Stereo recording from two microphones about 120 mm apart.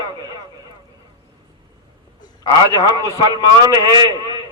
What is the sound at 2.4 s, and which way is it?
A man's voice, 35° right (ahead or behind).